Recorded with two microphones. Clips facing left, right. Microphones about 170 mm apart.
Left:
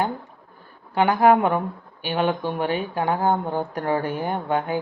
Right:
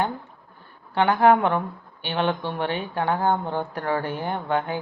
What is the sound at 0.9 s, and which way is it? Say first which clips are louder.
Speech: left 1 dB; 10° left (ahead or behind).